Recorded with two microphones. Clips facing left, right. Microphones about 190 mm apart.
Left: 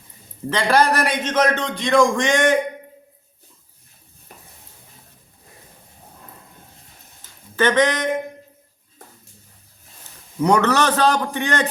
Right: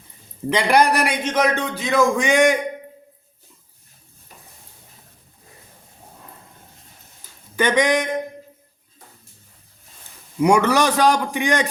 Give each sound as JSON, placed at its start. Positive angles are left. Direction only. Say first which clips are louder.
{"t": 0.5, "sound": "a man's voice", "louder": "right 1 dB", "side_deg": -15}
{"t": 4.3, "sound": "stir", "louder": "left 2 dB", "side_deg": 55}
{"t": 7.5, "sound": "speech", "louder": "even", "side_deg": -10}
{"t": 10.4, "sound": "a man's voice", "louder": "right 1 dB", "side_deg": -10}